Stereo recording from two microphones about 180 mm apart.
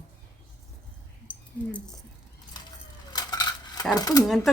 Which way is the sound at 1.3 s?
5° left (ahead or behind).